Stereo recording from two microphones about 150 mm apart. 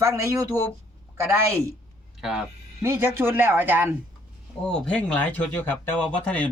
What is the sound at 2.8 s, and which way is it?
Speech, 15° right (ahead or behind).